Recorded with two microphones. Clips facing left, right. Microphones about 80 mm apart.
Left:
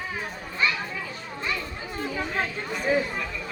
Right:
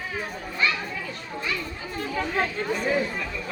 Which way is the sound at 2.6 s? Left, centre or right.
Centre.